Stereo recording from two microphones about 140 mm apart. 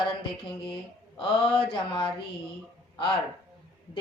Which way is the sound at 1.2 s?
35° left (ahead or behind).